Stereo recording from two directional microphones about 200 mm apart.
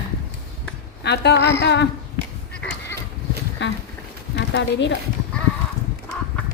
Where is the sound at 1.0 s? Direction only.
55° left (ahead or behind).